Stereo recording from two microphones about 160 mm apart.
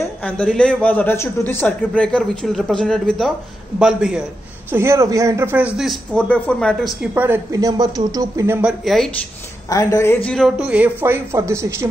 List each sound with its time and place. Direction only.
0.2 s a man's voice: 5° left (ahead or behind)
4.6 s a woman's voice: 15° right (ahead or behind)
6.2 s speech: 10° left (ahead or behind)
7.2 s speech: 20° right (ahead or behind)
8.8 s speech: centre (ahead or behind)
9.7 s a woman's voice: 20° left (ahead or behind)
10.2 s a woman's voice: centre (ahead or behind); by 11.9 s 20° right (ahead or behind)